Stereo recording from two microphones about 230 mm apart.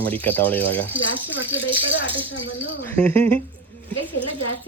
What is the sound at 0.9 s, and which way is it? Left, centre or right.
Speech, left.